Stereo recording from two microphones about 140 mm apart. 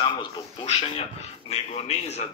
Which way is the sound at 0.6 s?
50° left (ahead or behind).